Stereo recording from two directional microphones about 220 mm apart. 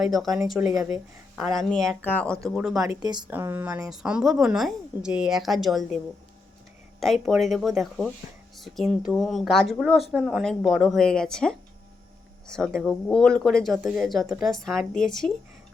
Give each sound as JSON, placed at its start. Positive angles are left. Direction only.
{"t": 0.0, "sound": "a woman's voice", "side_deg": 0}
{"t": 0.6, "sound": "a woman's voice", "side_deg": -15}
{"t": 1.4, "sound": "a woman's voice", "side_deg": 0}
{"t": 2.9, "sound": "a woman's voice", "side_deg": -20}
{"t": 7.0, "sound": "a woman's voice", "side_deg": 0}